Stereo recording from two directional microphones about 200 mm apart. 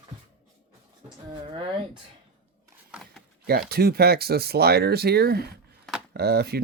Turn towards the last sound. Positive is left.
turn(degrees=-55)  # may be behind; listen again after turning